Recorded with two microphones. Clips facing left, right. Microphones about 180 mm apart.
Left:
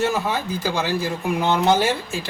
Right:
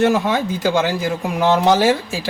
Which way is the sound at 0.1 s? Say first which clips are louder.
Right 6 dB; 90° right.